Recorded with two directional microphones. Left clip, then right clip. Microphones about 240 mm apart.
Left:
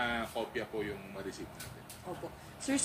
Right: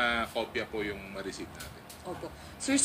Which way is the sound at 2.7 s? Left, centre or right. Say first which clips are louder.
Right 5 dB; right.